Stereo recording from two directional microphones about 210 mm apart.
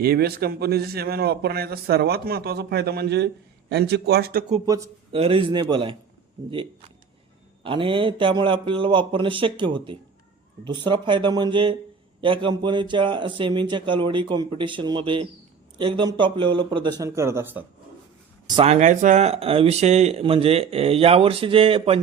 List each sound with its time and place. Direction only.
0.0 s speech: 45° right (ahead or behind)
4.6 s speech: 15° right (ahead or behind)
5.1 s speech: 25° right (ahead or behind)
7.6 s speech: 25° right (ahead or behind)
18.4 s speech: 25° right (ahead or behind)